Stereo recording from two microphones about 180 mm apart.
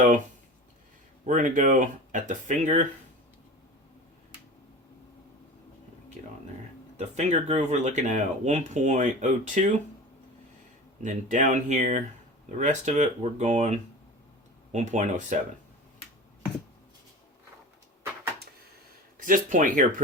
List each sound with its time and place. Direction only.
1.2 s speech: 45° right (ahead or behind)
6.9 s speech: 40° right (ahead or behind)
11.0 s speech: 45° right (ahead or behind)
19.1 s speech: 50° right (ahead or behind)